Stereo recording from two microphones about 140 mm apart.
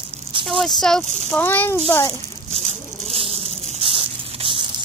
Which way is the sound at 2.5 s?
45° right (ahead or behind).